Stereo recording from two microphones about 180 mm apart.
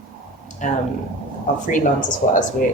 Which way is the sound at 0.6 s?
45° left (ahead or behind).